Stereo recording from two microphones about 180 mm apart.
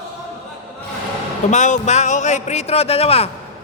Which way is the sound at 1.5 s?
40° left (ahead or behind).